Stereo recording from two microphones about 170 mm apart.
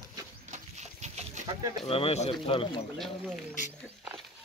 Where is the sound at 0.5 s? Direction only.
45° right (ahead or behind).